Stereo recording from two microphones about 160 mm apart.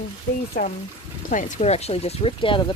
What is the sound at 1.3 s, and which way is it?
Speech, 50° left (ahead or behind).